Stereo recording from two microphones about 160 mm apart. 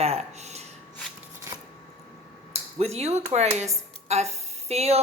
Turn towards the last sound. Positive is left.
turn(degrees=-40)  # may be behind; listen again after turning